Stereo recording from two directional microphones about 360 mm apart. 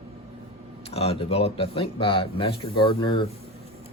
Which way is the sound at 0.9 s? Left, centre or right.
Centre.